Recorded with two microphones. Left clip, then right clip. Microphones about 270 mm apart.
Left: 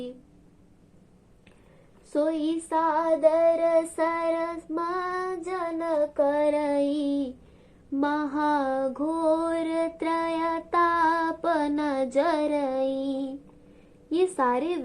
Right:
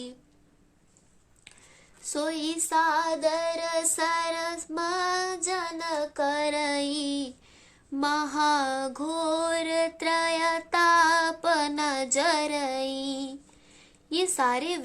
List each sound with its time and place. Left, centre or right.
2.1 s child singing: right
7.9 s music: right
14.1 s a woman's voice: right